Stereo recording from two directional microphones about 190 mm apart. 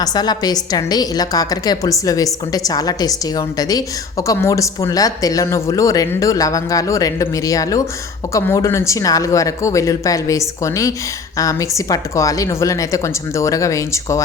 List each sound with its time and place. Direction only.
0.0 s a woman's voice: 20° left (ahead or behind)